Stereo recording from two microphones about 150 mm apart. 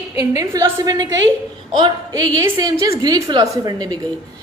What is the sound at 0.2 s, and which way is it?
A woman's voice, 20° right (ahead or behind).